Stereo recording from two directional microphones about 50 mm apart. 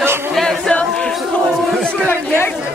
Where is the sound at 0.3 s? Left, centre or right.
Centre.